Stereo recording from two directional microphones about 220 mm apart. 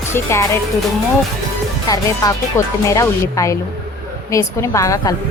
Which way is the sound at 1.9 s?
15° left (ahead or behind).